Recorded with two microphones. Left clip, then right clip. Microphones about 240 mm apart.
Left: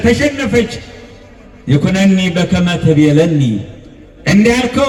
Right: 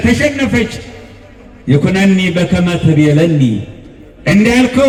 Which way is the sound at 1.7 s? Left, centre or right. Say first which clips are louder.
Right 1 dB; left.